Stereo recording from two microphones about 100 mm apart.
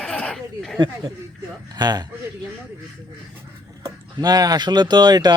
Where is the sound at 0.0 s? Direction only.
10° left (ahead or behind).